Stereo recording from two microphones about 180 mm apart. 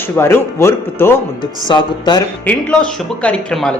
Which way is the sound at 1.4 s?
25° left (ahead or behind).